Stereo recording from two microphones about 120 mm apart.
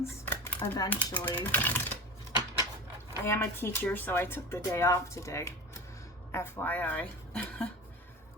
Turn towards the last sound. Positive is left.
turn(degrees=10)  # may be behind; listen again after turning